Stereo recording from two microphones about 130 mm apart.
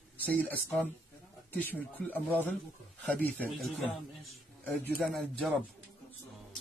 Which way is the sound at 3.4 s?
Centre (ahead or behind).